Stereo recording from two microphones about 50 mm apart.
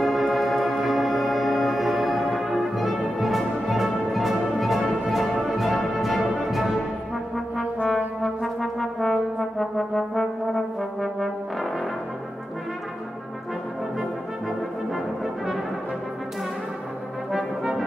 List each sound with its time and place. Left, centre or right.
0.0 s music: centre
7.3 s brass instrument: centre
17.3 s brass instrument: centre